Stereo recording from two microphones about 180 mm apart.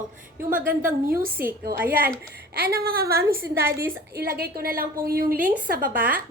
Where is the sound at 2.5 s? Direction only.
60° right (ahead or behind).